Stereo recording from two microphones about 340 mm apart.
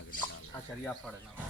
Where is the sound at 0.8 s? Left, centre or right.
Centre.